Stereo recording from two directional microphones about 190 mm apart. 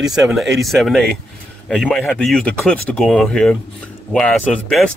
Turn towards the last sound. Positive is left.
turn(degrees=5)  # may be behind; listen again after turning